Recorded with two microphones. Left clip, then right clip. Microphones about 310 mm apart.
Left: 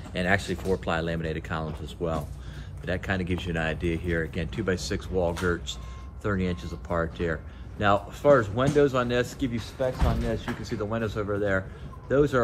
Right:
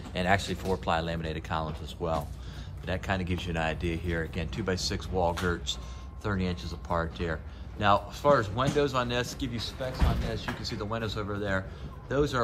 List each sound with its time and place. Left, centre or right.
0.1 s speech: centre